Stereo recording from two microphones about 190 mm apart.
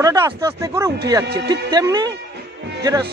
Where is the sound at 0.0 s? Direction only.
15° right (ahead or behind).